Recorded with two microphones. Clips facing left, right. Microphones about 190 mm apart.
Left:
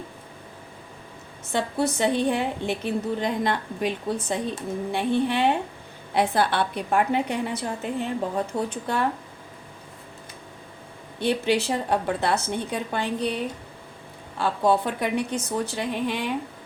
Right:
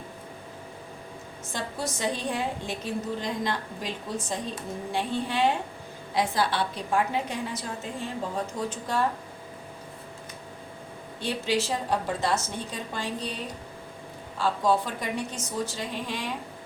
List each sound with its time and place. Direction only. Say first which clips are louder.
1.5 s a woman's voice: left 8 dB; 60° left (ahead or behind)
11.2 s a woman's voice: left 5 dB; 60° left (ahead or behind)